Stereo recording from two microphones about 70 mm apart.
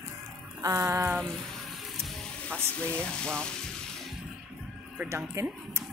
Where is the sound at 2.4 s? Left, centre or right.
Centre.